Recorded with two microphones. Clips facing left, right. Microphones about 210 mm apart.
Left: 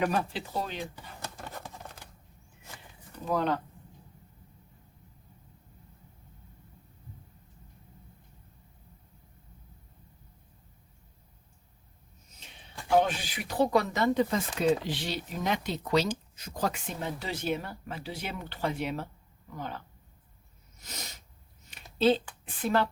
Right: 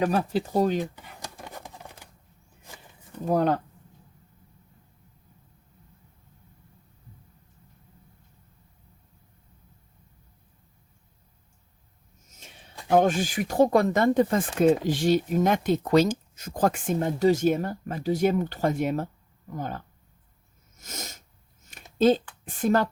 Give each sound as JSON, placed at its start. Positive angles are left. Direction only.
{"t": 0.0, "sound": "speech", "side_deg": -40}
{"t": 0.9, "sound": "patter", "side_deg": -15}
{"t": 3.2, "sound": "speech", "side_deg": -45}
{"t": 12.9, "sound": "speech", "side_deg": -45}
{"t": 20.7, "sound": "sneeze", "side_deg": -45}
{"t": 21.6, "sound": "a sound", "side_deg": -45}
{"t": 21.9, "sound": "speech", "side_deg": -45}